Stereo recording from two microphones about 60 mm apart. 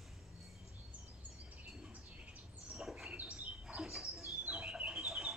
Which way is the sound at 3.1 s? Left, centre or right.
Centre.